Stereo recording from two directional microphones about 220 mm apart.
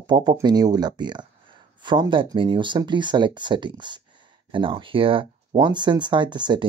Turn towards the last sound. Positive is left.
turn(degrees=-20)  # may be behind; listen again after turning